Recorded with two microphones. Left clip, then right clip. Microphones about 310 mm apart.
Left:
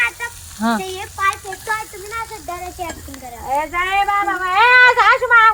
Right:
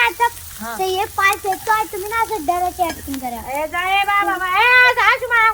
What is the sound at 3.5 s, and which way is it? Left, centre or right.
Speech, centre.